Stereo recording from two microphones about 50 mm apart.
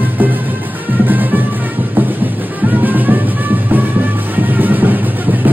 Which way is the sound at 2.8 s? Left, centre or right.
Right.